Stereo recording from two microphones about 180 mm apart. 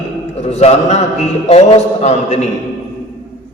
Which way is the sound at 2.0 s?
40° left (ahead or behind).